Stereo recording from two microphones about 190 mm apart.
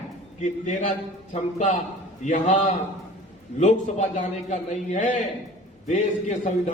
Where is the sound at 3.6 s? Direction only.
40° left (ahead or behind).